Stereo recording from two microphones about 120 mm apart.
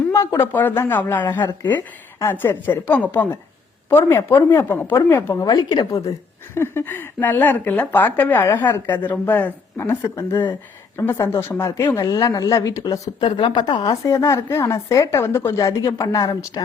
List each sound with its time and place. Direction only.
0.1 s a woman's voice: 25° left (ahead or behind)
6.5 s a woman's voice: 20° left (ahead or behind)
12.0 s a woman's voice: 30° left (ahead or behind)
13.9 s a woman's voice: 25° left (ahead or behind)